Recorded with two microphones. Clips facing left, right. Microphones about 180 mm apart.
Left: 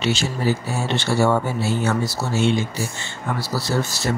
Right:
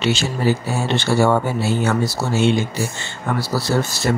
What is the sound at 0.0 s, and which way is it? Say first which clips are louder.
Speech: right 3 dB; 70° right (ahead or behind).